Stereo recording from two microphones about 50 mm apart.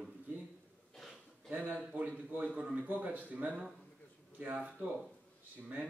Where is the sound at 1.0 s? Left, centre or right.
Centre.